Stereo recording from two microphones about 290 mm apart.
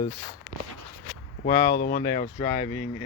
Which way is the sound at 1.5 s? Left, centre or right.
Left.